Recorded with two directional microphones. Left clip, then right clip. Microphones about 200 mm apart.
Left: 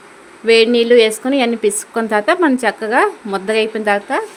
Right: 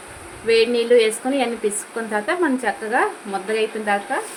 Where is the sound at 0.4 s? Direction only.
50° left (ahead or behind).